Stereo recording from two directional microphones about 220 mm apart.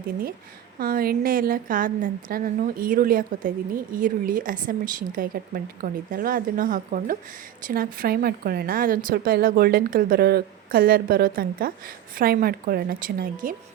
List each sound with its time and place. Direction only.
0.8 s speech: 40° right (ahead or behind)